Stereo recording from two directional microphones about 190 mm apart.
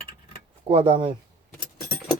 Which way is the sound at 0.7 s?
30° right (ahead or behind).